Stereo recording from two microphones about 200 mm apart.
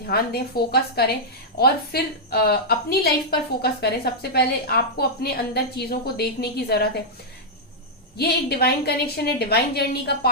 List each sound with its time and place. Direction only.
0.0 s a woman's voice: 50° left (ahead or behind)
8.2 s a woman's voice: 50° left (ahead or behind)